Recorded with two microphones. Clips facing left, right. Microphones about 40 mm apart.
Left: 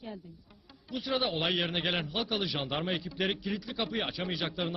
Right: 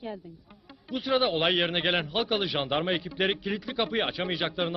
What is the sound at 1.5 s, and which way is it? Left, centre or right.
Speech, right.